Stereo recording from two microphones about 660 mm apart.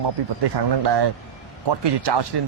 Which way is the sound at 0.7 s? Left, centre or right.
Right.